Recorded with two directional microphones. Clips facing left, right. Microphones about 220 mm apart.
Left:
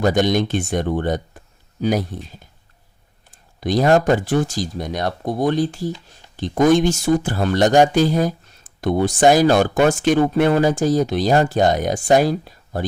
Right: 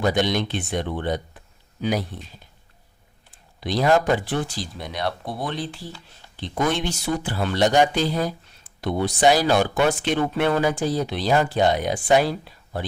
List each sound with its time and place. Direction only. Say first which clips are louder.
0.0 s speech: left 5 dB; 45° left (ahead or behind)
3.3 s speech: left 6 dB; 45° left (ahead or behind)